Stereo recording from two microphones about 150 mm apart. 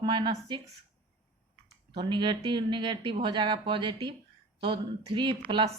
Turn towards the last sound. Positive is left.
turn(degrees=-35)  # may be behind; listen again after turning